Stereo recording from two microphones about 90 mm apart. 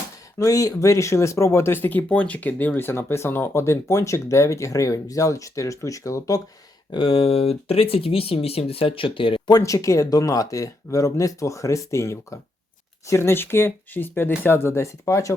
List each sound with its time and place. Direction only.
0.3 s speech: 40° left (ahead or behind)
6.9 s speech: 80° left
9.5 s speech: 40° left (ahead or behind)